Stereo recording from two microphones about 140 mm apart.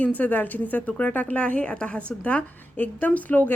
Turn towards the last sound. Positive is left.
turn(degrees=10)  # may be behind; listen again after turning